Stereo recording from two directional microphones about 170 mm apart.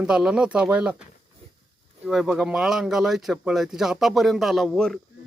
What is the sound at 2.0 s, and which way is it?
Speech, 5° right (ahead or behind).